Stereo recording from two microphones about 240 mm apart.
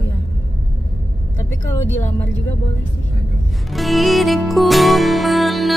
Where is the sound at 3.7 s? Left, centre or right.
Centre.